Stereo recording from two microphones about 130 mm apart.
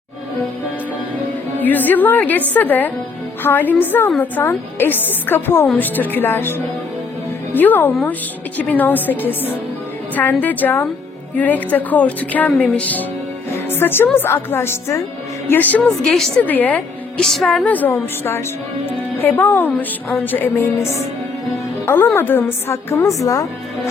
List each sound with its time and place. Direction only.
1.5 s a woman's voice: 15° left (ahead or behind)